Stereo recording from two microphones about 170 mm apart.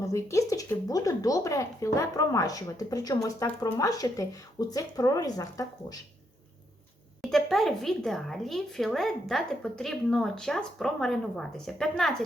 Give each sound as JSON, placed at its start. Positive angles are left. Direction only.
{"t": 0.0, "sound": "a woman's voice", "side_deg": 20}
{"t": 7.2, "sound": "a woman's voice", "side_deg": 0}